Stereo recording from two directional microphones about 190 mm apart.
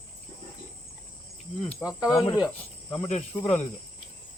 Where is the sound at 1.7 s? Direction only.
5° right (ahead or behind).